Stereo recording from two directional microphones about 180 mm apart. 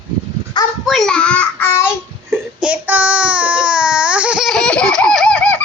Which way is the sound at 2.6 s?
10° right (ahead or behind).